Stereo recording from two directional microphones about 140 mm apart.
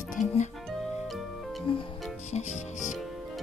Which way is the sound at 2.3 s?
55° left (ahead or behind).